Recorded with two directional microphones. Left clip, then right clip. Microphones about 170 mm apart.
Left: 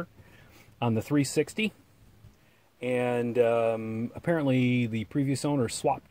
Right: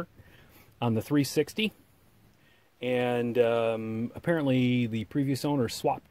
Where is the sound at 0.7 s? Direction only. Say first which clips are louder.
Even; 20° right (ahead or behind).